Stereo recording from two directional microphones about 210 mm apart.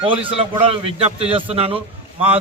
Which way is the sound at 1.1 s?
30° right (ahead or behind).